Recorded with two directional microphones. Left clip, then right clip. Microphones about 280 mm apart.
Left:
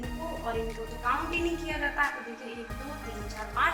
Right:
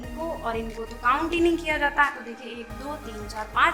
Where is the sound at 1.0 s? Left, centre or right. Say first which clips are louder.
Right 7 dB; right.